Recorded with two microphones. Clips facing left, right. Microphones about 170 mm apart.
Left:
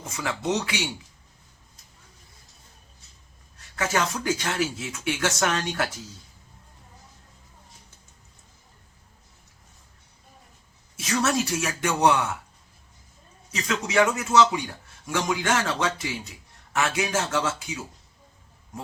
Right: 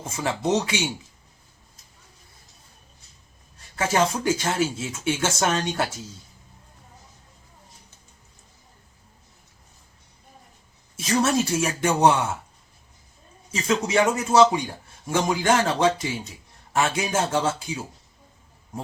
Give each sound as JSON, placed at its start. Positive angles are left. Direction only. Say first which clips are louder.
{"t": 0.0, "sound": "speech", "louder": "right 3 dB", "side_deg": -30}
{"t": 3.8, "sound": "speech", "louder": "right 4 dB", "side_deg": -30}
{"t": 11.0, "sound": "speech", "louder": "right 3 dB", "side_deg": -30}
{"t": 13.7, "sound": "a man's voice", "louder": "right 2 dB", "side_deg": -30}